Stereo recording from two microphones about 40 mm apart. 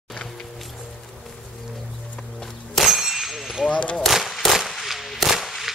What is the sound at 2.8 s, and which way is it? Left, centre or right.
Clang, centre.